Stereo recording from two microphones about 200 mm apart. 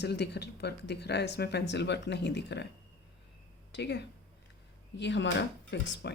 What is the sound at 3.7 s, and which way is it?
Speech, 60° left (ahead or behind).